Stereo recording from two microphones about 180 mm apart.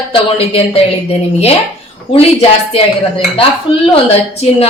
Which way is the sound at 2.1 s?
30° left (ahead or behind).